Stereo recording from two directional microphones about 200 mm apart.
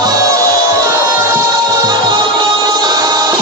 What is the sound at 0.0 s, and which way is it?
Music, 20° right (ahead or behind).